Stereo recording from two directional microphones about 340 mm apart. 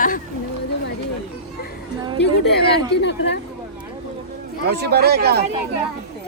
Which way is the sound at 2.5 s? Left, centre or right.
Left.